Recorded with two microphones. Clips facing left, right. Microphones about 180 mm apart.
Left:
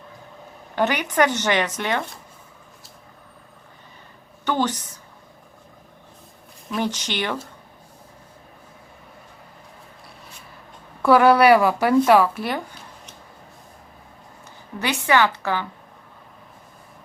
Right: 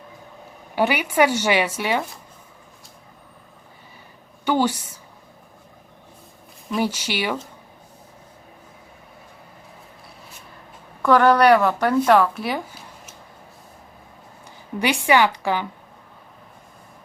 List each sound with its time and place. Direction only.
0.8 s a woman's voice: 10° right (ahead or behind)
4.4 s a woman's voice: 10° right (ahead or behind)
6.7 s a woman's voice: 10° right (ahead or behind)
11.0 s speech: 10° left (ahead or behind)
14.8 s a woman's voice: 15° right (ahead or behind)